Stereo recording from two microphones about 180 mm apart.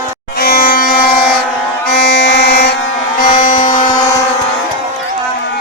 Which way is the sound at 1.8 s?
70° left (ahead or behind).